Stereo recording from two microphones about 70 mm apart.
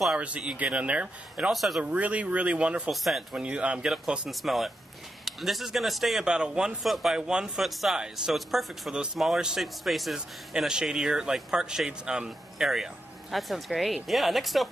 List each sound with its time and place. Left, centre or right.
0.2 s a man's voice: centre
1.5 s speech: centre
1.8 s a man's voice: centre
2.9 s speech: centre
3.3 s a man's voice: centre
6.2 s a man's voice: centre